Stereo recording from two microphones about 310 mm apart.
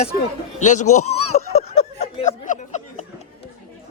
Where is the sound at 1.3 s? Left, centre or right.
Left.